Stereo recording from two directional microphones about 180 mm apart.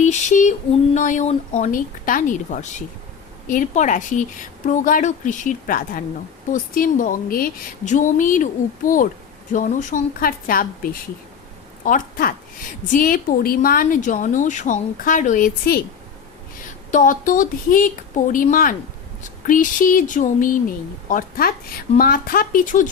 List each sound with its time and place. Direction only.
0.0 s female singing: 40° left (ahead or behind)
0.9 s a woman's voice: 45° left (ahead or behind)
11.9 s a woman's voice: 50° left (ahead or behind)
16.9 s a woman's voice: 50° left (ahead or behind)